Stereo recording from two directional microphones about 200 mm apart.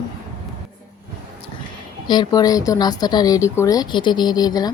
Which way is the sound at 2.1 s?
20° left (ahead or behind).